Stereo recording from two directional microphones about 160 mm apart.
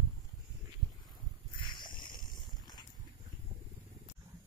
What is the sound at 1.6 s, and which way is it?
Boat, 30° left (ahead or behind).